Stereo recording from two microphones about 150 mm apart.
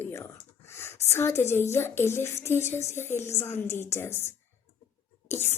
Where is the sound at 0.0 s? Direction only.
15° left (ahead or behind).